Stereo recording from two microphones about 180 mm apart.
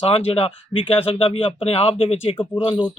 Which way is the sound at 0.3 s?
30° left (ahead or behind).